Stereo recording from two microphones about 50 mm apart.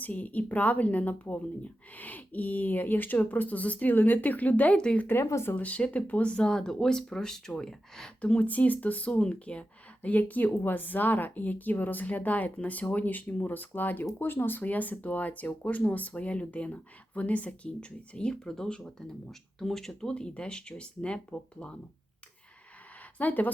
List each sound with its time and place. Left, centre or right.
0.0 s speech: left
5.0 s speech: left
5.5 s speech: left; by 8.1 s centre
8.2 s speech: left
9.1 s speech: centre
18.3 s speech: centre
23.1 s speech: left